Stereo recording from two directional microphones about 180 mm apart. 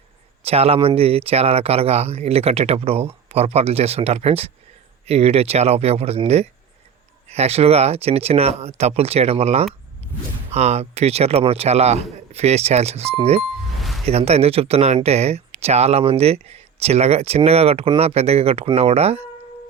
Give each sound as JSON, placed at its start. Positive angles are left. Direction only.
{"t": 0.4, "sound": "speech", "side_deg": -35}